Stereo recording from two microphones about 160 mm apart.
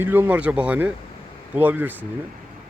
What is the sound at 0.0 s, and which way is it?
Speech, 15° right (ahead or behind).